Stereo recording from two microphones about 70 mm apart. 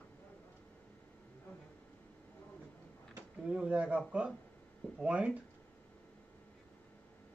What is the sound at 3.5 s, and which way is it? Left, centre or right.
Speech, centre.